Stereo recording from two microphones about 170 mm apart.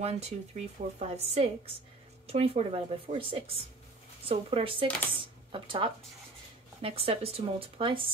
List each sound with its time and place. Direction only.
0.0 s a woman's voice: 40° right (ahead or behind)
5.2 s a sound: 30° right (ahead or behind)
6.8 s a woman's voice: 35° right (ahead or behind)